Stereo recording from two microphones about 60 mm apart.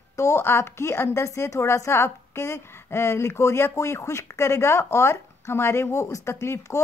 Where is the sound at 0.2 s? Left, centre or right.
Left.